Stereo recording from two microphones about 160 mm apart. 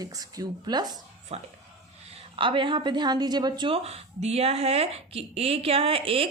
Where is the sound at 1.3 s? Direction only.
40° right (ahead or behind).